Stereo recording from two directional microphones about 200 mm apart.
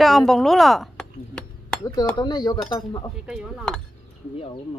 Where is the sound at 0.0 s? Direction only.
Centre (ahead or behind).